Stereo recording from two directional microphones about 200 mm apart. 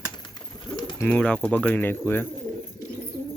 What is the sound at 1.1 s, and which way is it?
Speech, 5° left (ahead or behind).